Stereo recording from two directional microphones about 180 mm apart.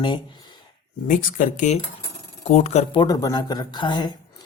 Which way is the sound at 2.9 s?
20° left (ahead or behind).